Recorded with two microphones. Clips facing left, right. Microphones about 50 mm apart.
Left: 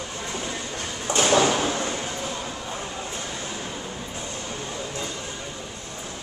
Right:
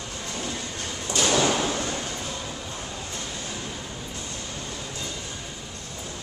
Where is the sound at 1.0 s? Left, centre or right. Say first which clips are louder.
Left 3 dB; left.